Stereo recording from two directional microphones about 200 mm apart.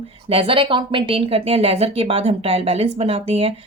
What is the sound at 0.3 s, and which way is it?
Speech, 30° right (ahead or behind).